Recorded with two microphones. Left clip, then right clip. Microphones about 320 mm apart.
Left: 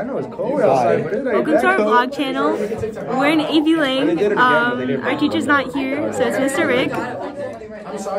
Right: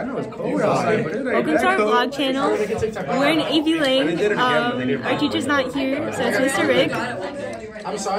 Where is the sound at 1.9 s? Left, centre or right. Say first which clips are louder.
Left 3 dB; centre.